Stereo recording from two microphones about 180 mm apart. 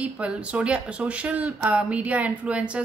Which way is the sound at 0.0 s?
5° right (ahead or behind).